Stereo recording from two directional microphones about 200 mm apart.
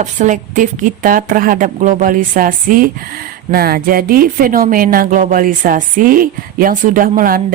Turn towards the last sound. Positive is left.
turn(degrees=-45)  # may be behind; listen again after turning